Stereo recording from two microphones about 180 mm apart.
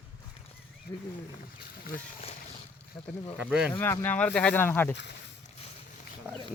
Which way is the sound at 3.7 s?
10° left (ahead or behind).